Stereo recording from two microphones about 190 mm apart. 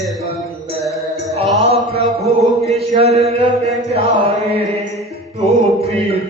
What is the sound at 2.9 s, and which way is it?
Chant, 35° right (ahead or behind).